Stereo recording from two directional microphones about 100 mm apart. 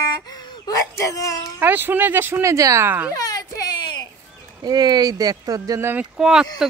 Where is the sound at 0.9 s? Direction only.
35° left (ahead or behind).